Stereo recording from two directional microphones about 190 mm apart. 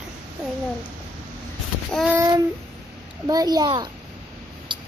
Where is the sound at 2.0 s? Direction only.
15° right (ahead or behind).